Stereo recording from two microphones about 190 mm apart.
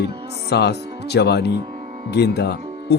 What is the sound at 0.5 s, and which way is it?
Speech, 60° left (ahead or behind).